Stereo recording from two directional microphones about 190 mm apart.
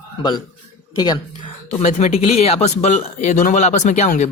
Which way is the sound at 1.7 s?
35° left (ahead or behind).